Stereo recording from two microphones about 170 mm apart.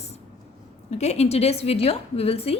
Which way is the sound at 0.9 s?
40° left (ahead or behind).